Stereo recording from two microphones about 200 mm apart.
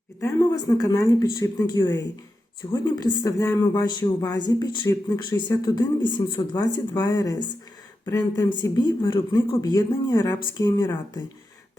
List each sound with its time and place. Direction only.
0.2 s speech: 15° left (ahead or behind)